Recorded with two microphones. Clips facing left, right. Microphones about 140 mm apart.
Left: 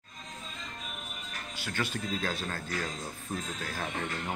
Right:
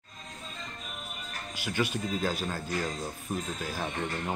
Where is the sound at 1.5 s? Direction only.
15° right (ahead or behind).